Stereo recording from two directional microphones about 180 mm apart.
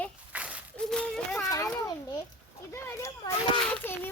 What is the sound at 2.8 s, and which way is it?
Children playing, 15° left (ahead or behind).